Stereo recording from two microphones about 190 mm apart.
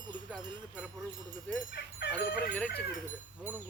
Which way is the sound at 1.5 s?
10° left (ahead or behind).